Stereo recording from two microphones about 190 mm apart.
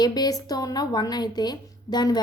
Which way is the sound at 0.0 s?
20° left (ahead or behind).